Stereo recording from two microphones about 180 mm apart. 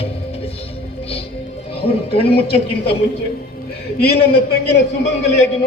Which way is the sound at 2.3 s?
60° left (ahead or behind).